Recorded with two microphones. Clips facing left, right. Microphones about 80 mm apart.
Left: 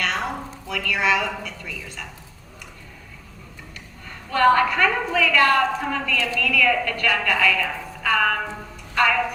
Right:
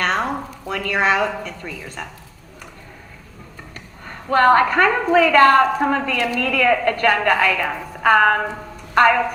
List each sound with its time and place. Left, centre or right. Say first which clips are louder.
0.0 s a woman's voice: right 5 dB; right
3.8 s a woman's voice: right 5 dB; right